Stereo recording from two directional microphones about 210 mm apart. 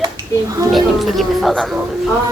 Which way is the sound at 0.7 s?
Centre (ahead or behind).